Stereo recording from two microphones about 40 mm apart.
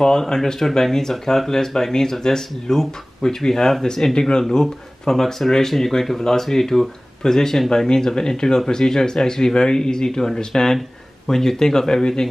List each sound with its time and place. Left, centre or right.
0.0 s speech: centre